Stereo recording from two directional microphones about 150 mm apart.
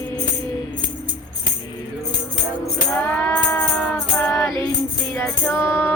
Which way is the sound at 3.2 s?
10° left (ahead or behind).